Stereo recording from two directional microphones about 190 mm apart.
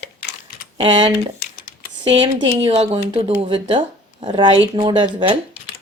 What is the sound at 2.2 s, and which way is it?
Speech, 30° right (ahead or behind).